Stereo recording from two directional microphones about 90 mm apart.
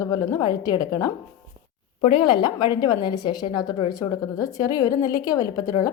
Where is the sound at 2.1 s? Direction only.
60° left (ahead or behind).